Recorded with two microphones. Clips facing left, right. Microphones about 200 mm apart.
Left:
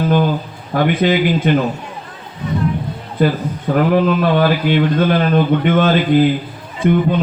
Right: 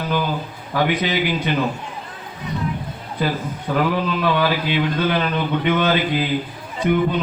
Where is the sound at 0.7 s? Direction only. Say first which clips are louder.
Left 6 dB; 50° left (ahead or behind).